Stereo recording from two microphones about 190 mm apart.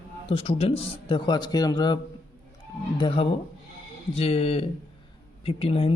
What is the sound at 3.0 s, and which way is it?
Speech, 25° left (ahead or behind).